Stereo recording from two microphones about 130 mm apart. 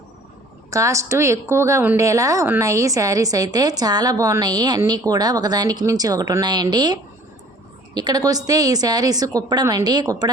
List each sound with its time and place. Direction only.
0.7 s a woman's voice: 25° right (ahead or behind)